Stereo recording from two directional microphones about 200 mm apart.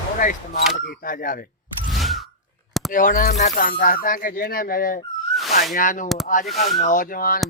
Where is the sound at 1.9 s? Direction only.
Centre (ahead or behind).